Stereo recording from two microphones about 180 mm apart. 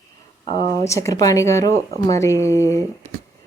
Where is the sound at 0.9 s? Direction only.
15° left (ahead or behind).